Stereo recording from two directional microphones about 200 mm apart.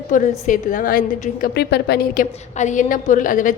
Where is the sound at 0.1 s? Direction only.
40° left (ahead or behind).